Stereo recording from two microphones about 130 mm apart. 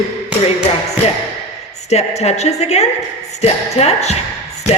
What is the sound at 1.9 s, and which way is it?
A woman's voice, 55° left (ahead or behind).